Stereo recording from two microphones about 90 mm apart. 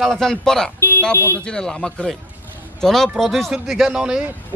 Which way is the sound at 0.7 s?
25° left (ahead or behind).